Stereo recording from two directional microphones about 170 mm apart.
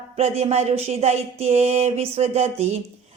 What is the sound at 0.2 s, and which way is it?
A woman's voice, 40° right (ahead or behind).